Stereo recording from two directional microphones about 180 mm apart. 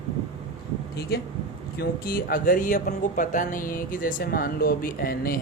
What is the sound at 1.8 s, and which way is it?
Speech, 55° left (ahead or behind).